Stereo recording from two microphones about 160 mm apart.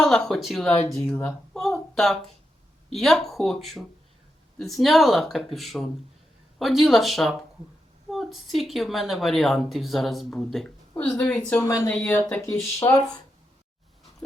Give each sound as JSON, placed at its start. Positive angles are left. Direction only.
{"t": 0.0, "sound": "speech", "side_deg": 5}